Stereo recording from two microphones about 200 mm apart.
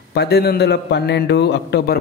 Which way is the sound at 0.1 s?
55° left (ahead or behind).